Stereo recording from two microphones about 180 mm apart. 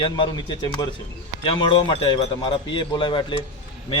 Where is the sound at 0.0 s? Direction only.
30° left (ahead or behind).